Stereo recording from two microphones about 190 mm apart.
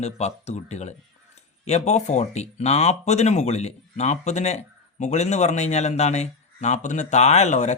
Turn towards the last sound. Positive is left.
turn(degrees=35)  # may be behind; listen again after turning